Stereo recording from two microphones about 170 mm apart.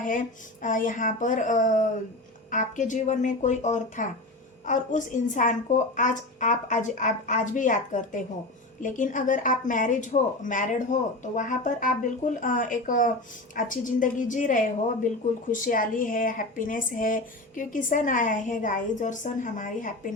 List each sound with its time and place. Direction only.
0.6 s speech: 50° left (ahead or behind)